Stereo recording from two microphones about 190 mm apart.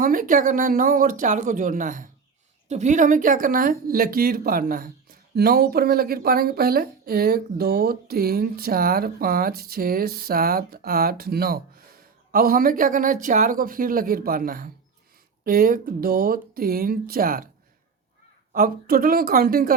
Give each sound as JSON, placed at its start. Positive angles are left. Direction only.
{"t": 0.0, "sound": "speech", "side_deg": -45}
{"t": 18.5, "sound": "speech", "side_deg": -50}